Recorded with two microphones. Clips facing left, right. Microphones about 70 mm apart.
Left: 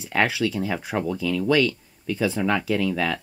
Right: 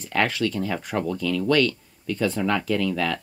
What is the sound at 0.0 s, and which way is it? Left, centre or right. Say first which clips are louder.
Speech: left 1 dB; centre.